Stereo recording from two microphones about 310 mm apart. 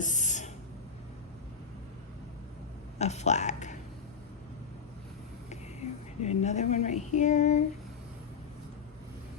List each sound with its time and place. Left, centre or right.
0.0 s a sound: left
3.0 s speech: left
5.5 s a woman's voice: left